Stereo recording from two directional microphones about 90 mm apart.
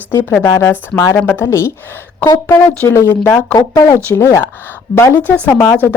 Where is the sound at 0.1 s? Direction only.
30° left (ahead or behind).